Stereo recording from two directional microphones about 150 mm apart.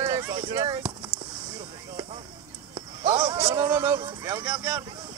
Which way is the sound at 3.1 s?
20° right (ahead or behind).